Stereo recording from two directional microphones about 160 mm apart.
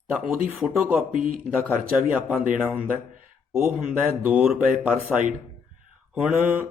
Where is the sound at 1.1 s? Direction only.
60° right (ahead or behind).